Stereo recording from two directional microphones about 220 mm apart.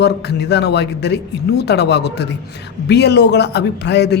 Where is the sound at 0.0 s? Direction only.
50° left (ahead or behind).